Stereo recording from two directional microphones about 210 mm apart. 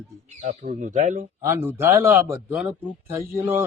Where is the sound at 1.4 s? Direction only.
10° right (ahead or behind).